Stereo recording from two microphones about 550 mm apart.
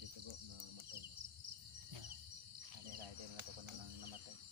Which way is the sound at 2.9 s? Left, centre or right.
Right.